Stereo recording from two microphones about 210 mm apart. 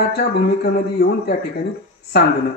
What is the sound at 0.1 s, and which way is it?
A man's voice, 50° left (ahead or behind).